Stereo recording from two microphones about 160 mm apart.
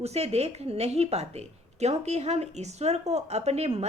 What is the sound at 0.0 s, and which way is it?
Speech, 40° right (ahead or behind).